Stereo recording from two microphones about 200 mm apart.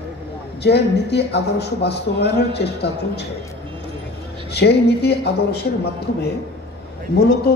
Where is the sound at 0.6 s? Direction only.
55° left (ahead or behind).